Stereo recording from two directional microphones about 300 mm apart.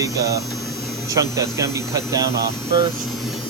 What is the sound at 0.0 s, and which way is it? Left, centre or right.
Hum, centre.